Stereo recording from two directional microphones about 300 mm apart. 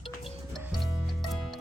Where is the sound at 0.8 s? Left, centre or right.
Centre.